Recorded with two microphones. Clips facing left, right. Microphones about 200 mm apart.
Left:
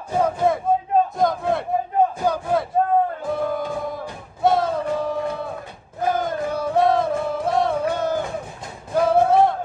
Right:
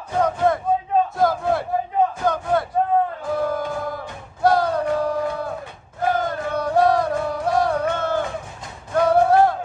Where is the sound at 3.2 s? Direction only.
Centre (ahead or behind).